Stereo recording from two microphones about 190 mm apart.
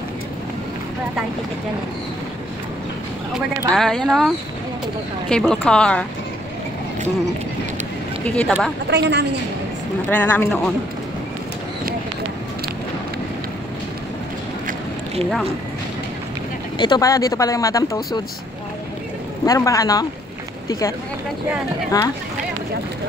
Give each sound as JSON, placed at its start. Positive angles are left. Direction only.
{"t": 3.3, "sound": "speech", "side_deg": 0}
{"t": 5.3, "sound": "speech", "side_deg": 5}
{"t": 8.3, "sound": "speech", "side_deg": 5}
{"t": 8.9, "sound": "a woman's voice", "side_deg": -60}
{"t": 10.0, "sound": "speech", "side_deg": 10}
{"t": 16.7, "sound": "speech", "side_deg": 25}
{"t": 19.4, "sound": "speech", "side_deg": 15}
{"t": 21.9, "sound": "speech", "side_deg": 20}